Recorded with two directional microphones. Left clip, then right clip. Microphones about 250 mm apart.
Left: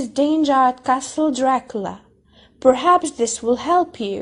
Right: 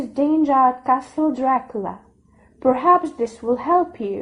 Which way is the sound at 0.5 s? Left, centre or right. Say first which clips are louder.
Right 1 dB; left.